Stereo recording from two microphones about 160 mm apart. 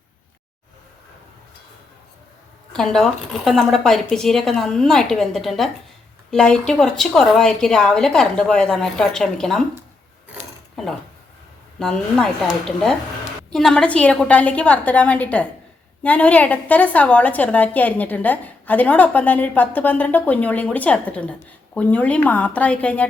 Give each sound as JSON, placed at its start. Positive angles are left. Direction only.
{"t": 2.7, "sound": "a woman's voice", "side_deg": 5}
{"t": 11.8, "sound": "a woman's voice", "side_deg": 5}